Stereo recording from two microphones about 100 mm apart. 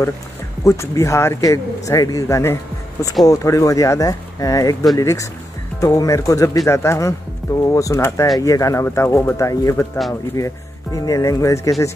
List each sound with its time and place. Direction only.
0.7 s a man's voice: 30° left (ahead or behind)